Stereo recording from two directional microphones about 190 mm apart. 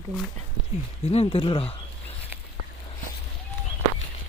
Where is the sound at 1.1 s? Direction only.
30° left (ahead or behind).